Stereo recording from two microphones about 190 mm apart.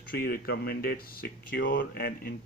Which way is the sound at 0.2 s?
50° left (ahead or behind).